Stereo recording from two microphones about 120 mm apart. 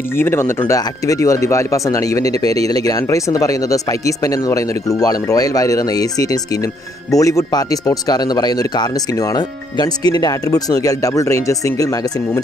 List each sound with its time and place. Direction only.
0.1 s speech: 20° left (ahead or behind)
2.4 s speech: 55° right (ahead or behind)
2.7 s speech: 30° left (ahead or behind)